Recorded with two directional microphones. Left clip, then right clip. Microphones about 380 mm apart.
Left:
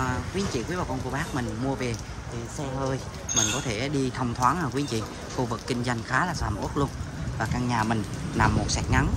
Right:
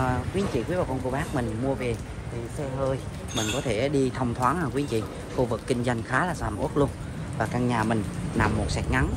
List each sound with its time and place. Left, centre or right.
0.0 s speech: centre
3.6 s speech: centre